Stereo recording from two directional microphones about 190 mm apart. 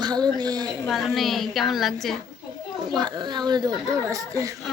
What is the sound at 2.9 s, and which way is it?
Speech, 20° right (ahead or behind).